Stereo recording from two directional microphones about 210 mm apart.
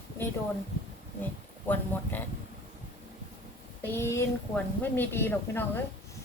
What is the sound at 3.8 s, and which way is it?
Speech, 10° left (ahead or behind).